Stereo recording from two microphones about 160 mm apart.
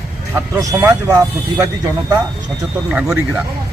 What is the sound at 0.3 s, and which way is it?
Speech, 20° right (ahead or behind).